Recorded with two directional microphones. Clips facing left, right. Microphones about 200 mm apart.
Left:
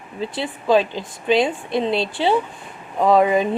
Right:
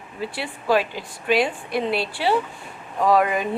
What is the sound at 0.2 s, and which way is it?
Speech, 20° left (ahead or behind).